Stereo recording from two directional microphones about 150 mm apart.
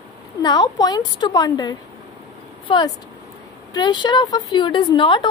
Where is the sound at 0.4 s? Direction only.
25° left (ahead or behind).